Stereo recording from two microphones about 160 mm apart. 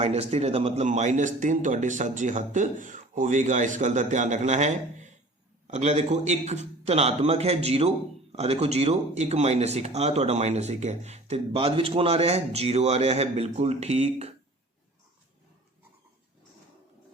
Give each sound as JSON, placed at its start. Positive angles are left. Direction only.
{"t": 0.0, "sound": "a man's voice", "side_deg": -40}